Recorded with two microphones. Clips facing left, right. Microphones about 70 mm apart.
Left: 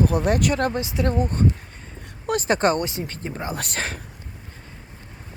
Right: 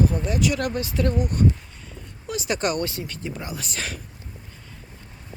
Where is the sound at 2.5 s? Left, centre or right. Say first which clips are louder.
Left 3 dB; left.